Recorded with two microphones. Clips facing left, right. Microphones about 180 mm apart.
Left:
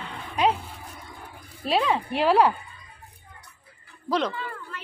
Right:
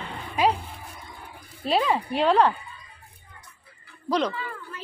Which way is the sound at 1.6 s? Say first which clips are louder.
Even; centre (ahead or behind).